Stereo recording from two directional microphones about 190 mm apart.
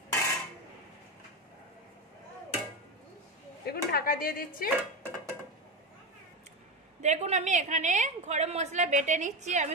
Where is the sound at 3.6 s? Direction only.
50° left (ahead or behind).